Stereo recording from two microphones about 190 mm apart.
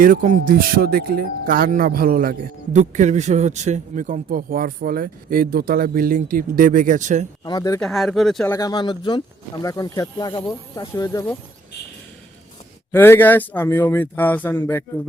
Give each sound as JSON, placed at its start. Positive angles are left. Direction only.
{"t": 0.0, "sound": "a man's voice", "side_deg": -45}
{"t": 7.4, "sound": "speech", "side_deg": 20}
{"t": 7.8, "sound": "speech", "side_deg": 0}
{"t": 8.5, "sound": "speech", "side_deg": 20}
{"t": 12.9, "sound": "speech", "side_deg": 10}